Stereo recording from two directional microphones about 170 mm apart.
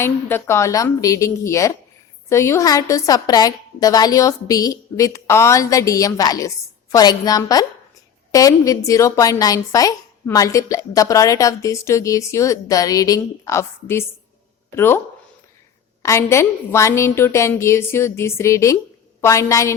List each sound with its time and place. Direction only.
0.0 s a woman's voice: 15° left (ahead or behind)
16.0 s a woman's voice: 15° left (ahead or behind)